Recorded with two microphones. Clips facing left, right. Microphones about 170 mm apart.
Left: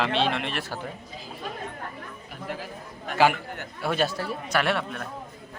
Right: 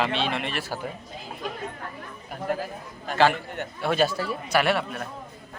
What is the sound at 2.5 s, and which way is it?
Speech, 45° right (ahead or behind).